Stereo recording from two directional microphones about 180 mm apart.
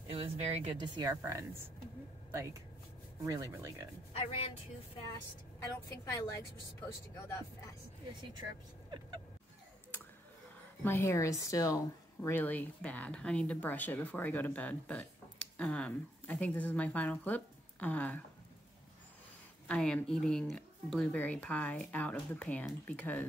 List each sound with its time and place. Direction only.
0.1 s speech: 30° right (ahead or behind)
3.3 s speech: 15° right (ahead or behind)
4.1 s speech: 30° left (ahead or behind)
5.1 s speech: 20° left (ahead or behind)
10.8 s speech: 15° left (ahead or behind)
19.7 s speech: 5° left (ahead or behind)